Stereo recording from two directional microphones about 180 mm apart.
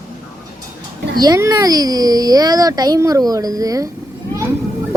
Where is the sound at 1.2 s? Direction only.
20° right (ahead or behind).